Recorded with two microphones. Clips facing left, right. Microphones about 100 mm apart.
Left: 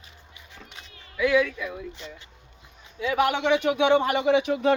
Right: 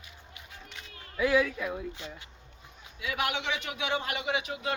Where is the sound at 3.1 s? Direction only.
50° left (ahead or behind).